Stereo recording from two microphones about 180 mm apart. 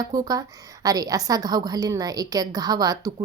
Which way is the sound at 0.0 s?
20° right (ahead or behind).